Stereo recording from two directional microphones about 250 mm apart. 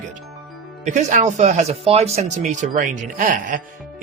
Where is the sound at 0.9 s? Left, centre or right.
Right.